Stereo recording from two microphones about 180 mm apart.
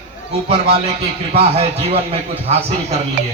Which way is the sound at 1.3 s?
35° right (ahead or behind).